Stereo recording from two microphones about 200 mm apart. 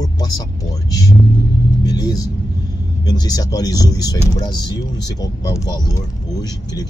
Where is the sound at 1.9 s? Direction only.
20° left (ahead or behind).